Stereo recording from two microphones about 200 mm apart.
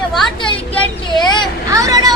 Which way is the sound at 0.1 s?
5° left (ahead or behind).